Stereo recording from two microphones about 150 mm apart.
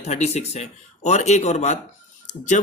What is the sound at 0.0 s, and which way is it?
Speech, 45° left (ahead or behind).